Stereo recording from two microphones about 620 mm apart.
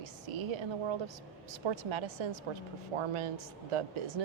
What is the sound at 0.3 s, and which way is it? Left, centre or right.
A woman's voice, right.